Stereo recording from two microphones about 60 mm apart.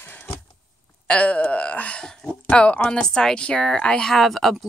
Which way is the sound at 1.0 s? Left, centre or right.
Left.